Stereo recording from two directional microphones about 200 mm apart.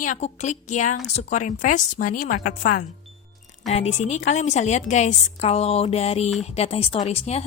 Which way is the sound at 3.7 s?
35° left (ahead or behind).